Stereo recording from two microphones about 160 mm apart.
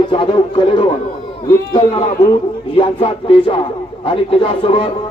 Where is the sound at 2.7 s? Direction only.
35° left (ahead or behind).